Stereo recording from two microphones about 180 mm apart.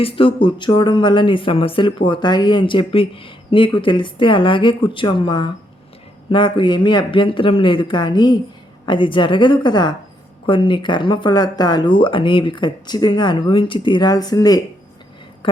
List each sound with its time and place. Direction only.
0.0 s speech: 30° left (ahead or behind)